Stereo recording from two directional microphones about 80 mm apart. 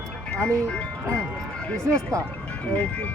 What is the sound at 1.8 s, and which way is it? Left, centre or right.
Speech, right.